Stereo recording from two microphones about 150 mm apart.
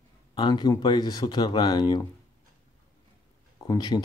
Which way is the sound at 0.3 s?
30° left (ahead or behind).